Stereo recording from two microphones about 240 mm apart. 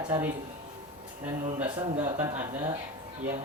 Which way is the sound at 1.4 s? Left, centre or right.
Right.